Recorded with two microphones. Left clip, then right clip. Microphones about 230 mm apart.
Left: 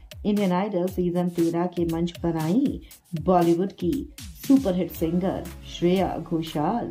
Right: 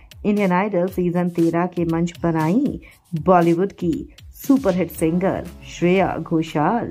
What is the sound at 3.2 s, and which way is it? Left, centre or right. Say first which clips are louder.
Speech: right 5 dB; right.